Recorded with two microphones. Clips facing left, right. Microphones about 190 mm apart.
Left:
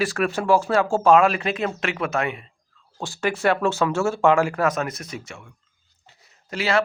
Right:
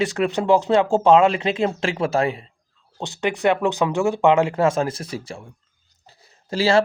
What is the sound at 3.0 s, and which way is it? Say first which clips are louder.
Speech: right 1 dB; 20° right (ahead or behind).